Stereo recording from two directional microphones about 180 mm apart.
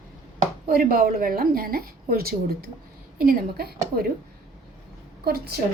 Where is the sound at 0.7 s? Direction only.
55° right (ahead or behind).